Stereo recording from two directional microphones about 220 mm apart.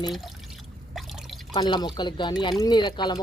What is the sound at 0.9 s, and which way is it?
Drip, centre (ahead or behind).